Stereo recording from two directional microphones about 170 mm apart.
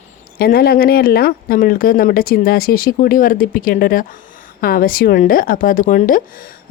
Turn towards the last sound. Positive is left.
turn(degrees=55)  # may be behind; listen again after turning